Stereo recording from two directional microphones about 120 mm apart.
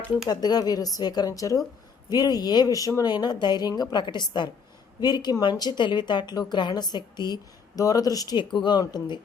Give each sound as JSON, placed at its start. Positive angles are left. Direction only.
{"t": 0.3, "sound": "speech", "side_deg": 35}